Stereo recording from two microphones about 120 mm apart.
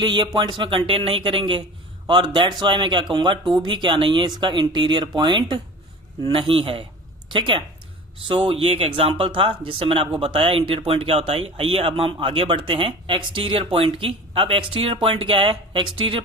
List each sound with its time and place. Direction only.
0.0 s a woman's voice: 40° right (ahead or behind)